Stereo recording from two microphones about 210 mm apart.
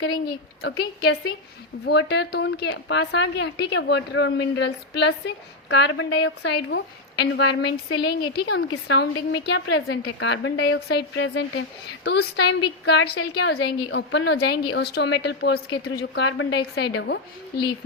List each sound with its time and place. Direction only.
0.6 s a woman's voice: 50° left (ahead or behind)